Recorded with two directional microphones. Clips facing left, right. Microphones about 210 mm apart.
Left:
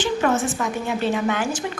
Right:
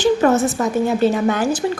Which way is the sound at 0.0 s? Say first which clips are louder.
Right 6 dB; 40° right (ahead or behind).